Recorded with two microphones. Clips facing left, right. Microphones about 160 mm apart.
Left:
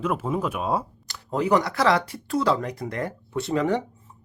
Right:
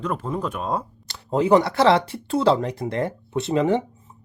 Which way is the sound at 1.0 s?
25° right (ahead or behind).